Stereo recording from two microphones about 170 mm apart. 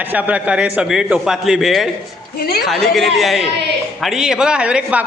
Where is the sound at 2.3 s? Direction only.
65° left (ahead or behind).